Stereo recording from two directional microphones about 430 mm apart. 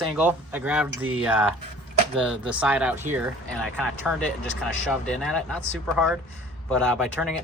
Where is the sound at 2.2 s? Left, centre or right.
Centre.